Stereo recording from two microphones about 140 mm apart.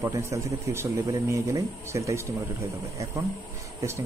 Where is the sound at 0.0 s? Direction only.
20° right (ahead or behind).